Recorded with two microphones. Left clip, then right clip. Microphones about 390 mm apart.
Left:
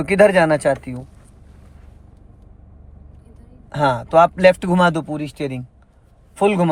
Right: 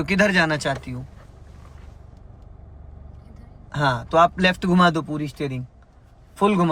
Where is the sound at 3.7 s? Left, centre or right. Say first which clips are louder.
Left 4 dB; centre.